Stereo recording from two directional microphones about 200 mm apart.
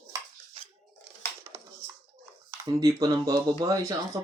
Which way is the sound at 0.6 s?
30° right (ahead or behind).